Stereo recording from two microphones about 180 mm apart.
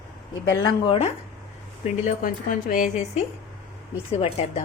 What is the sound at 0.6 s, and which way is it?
Speech, 30° left (ahead or behind).